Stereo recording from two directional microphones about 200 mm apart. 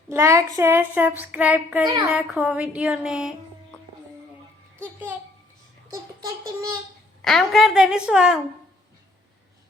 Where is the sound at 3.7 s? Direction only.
5° left (ahead or behind).